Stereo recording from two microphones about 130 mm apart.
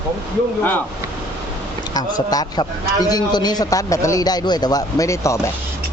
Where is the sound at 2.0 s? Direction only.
30° left (ahead or behind).